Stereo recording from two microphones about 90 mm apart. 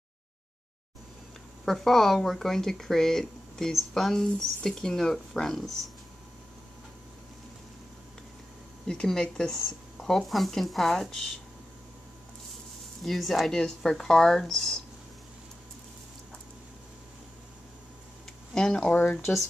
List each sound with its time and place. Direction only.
1.7 s speech: 5° left (ahead or behind)
8.8 s speech: 5° left (ahead or behind)
13.0 s speech: centre (ahead or behind)
18.5 s speech: 10° left (ahead or behind)
18.9 s speech: 20° left (ahead or behind)